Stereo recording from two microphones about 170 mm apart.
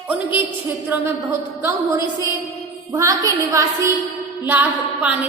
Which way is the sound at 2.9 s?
20° right (ahead or behind).